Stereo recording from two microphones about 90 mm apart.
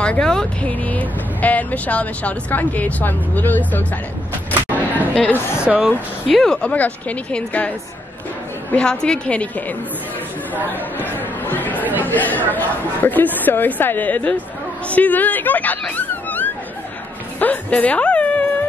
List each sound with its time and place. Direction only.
0.0 s speech: 10° left (ahead or behind)
5.1 s speech: 20° left (ahead or behind)
5.7 s speech: 15° right (ahead or behind)
6.2 s speech: centre (ahead or behind)
6.7 s speech: 15° left (ahead or behind)
8.7 s speech: 10° left (ahead or behind)
11.8 s chatter: 20° right (ahead or behind)
12.1 s speech: 20° left (ahead or behind)
16.0 s wail: 20° left (ahead or behind)
17.4 s speech: 15° left (ahead or behind)